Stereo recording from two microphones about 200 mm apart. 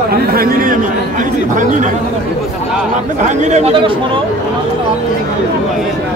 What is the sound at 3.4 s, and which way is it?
Speech, 35° right (ahead or behind).